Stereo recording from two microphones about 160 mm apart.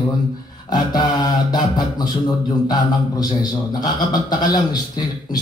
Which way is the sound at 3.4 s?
25° left (ahead or behind).